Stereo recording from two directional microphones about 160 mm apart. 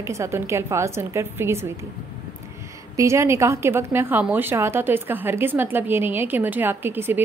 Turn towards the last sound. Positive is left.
turn(degrees=-15)  # may be behind; listen again after turning